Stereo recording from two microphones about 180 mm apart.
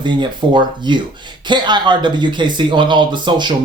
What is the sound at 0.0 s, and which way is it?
Speech, 25° right (ahead or behind).